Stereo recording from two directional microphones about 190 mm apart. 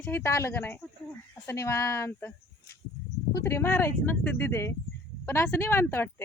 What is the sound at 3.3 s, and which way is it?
Speech, 15° left (ahead or behind).